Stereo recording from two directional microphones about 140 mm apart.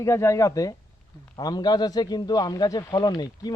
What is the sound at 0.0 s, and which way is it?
A man's voice, 20° left (ahead or behind).